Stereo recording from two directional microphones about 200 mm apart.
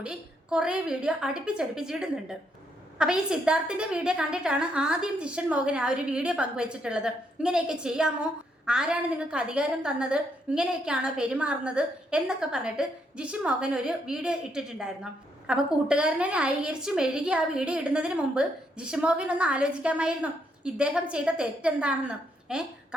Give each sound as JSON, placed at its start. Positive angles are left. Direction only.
{"t": 0.0, "sound": "a woman's voice", "side_deg": -5}